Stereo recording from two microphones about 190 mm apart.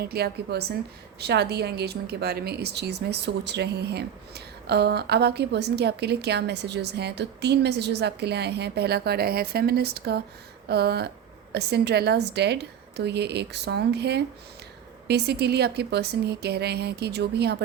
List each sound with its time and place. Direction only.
0.0 s a woman's voice: 55° right (ahead or behind)